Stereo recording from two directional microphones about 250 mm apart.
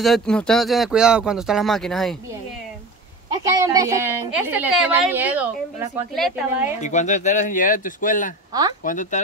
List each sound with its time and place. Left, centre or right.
0.0 s speech: centre
3.5 s a woman's voice: centre
6.8 s speech: left